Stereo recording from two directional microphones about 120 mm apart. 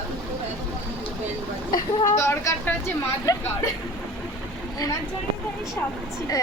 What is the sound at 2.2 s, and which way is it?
A woman's voice, 20° left (ahead or behind).